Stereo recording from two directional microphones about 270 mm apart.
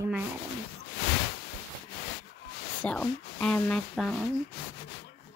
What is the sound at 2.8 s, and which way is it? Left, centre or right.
Speech, centre.